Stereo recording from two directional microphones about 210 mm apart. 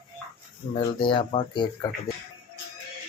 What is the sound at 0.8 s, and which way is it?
Speech, 25° left (ahead or behind).